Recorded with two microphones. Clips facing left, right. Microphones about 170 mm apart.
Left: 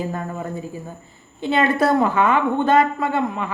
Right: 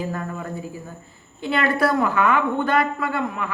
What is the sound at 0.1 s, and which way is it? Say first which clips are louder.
A woman's voice: left 2 dB; 25° left (ahead or behind).